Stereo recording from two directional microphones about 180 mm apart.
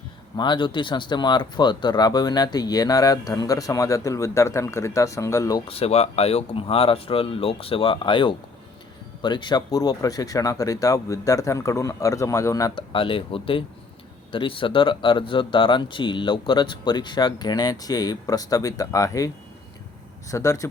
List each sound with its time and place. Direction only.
0.3 s speech: 25° left (ahead or behind)
5.6 s speech: 35° left (ahead or behind); by 12.8 s 20° left (ahead or behind)
12.9 s speech: 30° left (ahead or behind)
20.3 s speech: 15° left (ahead or behind)